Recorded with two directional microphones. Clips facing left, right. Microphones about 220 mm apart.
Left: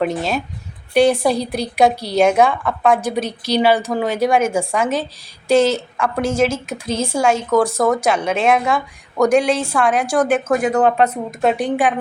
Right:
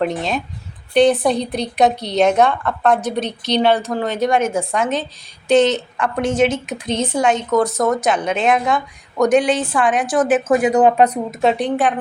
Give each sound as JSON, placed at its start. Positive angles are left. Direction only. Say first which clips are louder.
{"t": 0.0, "sound": "a woman's voice", "louder": "left 1 dB", "side_deg": 5}
{"t": 11.3, "sound": "a woman's voice", "louder": "even", "side_deg": 0}